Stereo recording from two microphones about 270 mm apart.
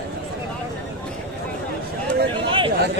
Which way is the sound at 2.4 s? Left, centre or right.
Centre.